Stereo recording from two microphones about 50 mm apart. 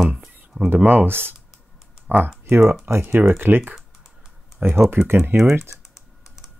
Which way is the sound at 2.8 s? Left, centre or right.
Right.